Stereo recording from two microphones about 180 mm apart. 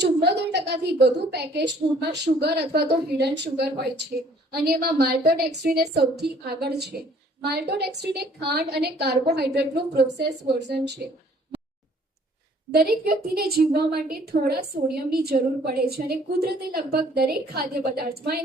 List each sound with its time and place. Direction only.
0.0 s a woman's voice: 70° right (ahead or behind)
4.5 s a woman's voice: 60° right (ahead or behind)
12.7 s a woman's voice: 55° right (ahead or behind)